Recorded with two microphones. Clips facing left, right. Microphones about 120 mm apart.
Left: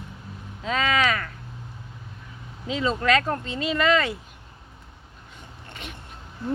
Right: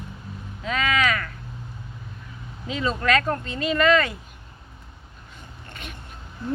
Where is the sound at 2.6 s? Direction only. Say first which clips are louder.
Left 1 dB; 20° left (ahead or behind).